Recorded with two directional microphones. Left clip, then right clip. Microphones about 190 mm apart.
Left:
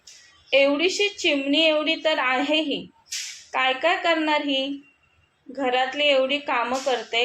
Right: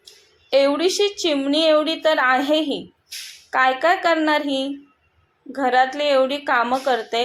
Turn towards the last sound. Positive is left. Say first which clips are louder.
# right 3 dB
turn(degrees=-25)  # may be behind; listen again after turning